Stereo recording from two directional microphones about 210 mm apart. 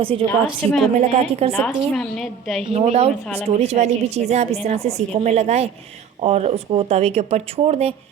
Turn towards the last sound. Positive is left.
turn(degrees=-30)  # may be behind; listen again after turning